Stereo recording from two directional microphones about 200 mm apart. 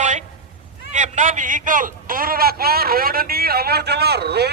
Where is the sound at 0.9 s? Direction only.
35° right (ahead or behind).